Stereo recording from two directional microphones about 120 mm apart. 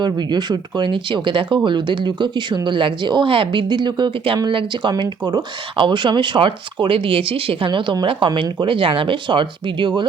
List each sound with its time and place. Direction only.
0.0 s speech: 40° right (ahead or behind)